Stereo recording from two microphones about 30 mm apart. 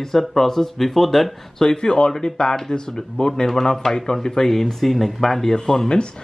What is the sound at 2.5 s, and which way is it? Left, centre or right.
Speech, centre.